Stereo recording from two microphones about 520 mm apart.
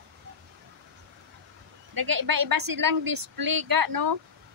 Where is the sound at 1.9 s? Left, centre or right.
Right.